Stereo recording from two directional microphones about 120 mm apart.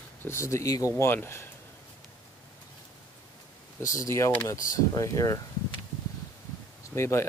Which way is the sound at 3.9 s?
25° left (ahead or behind).